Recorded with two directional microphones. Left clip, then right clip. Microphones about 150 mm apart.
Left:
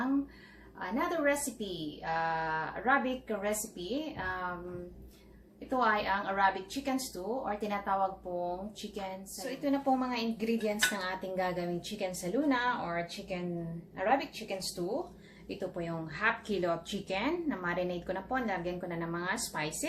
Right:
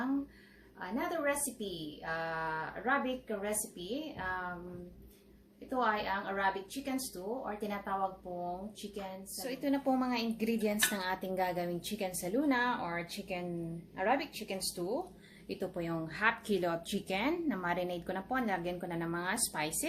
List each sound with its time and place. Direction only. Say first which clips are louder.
0.8 s a woman's voice: left 4 dB; 10° right (ahead or behind)
5.7 s a woman's voice: left 3 dB; 10° right (ahead or behind)
9.4 s speech: left 2 dB; 70° right (ahead or behind)